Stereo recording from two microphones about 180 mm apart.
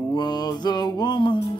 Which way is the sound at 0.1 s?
25° left (ahead or behind).